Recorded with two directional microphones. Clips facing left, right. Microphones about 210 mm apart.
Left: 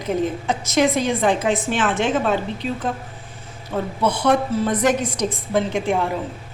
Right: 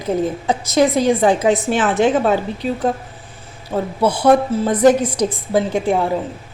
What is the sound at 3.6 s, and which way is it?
A woman's voice, 30° right (ahead or behind).